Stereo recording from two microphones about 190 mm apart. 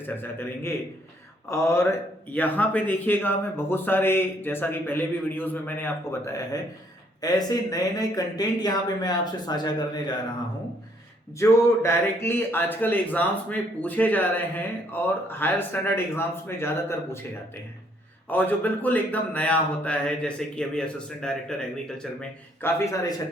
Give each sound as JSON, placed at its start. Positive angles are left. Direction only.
{"t": 0.0, "sound": "speech", "side_deg": 10}
{"t": 11.3, "sound": "speech", "side_deg": 15}
{"t": 18.3, "sound": "speech", "side_deg": 10}